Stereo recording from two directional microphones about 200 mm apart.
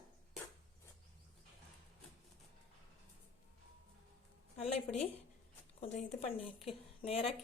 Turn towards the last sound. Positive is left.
turn(degrees=30)  # may be behind; listen again after turning